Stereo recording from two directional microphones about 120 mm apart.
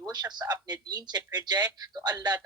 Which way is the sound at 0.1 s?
35° right (ahead or behind).